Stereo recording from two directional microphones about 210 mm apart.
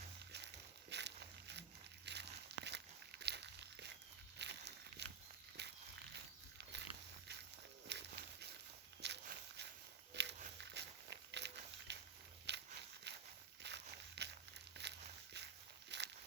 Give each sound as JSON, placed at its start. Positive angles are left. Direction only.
{"t": 0.3, "sound": "crumpling", "side_deg": -55}
{"t": 2.0, "sound": "a sound", "side_deg": -55}
{"t": 4.4, "sound": "walk", "side_deg": -55}
{"t": 5.6, "sound": "a sound", "side_deg": -50}
{"t": 6.6, "sound": "dog", "side_deg": -55}
{"t": 7.9, "sound": "walk", "side_deg": -55}
{"t": 10.6, "sound": "a sound", "side_deg": -55}
{"t": 13.1, "sound": "walk", "side_deg": -55}
{"t": 14.8, "sound": "crumpling", "side_deg": -55}
{"t": 15.9, "sound": "walk", "side_deg": -55}